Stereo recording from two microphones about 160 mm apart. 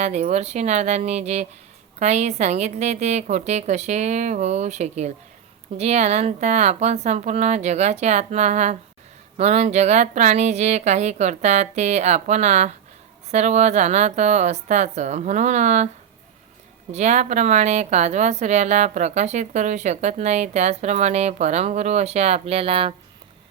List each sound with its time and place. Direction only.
0.0 s a woman's voice: 45° right (ahead or behind)
16.9 s a woman's voice: 45° right (ahead or behind)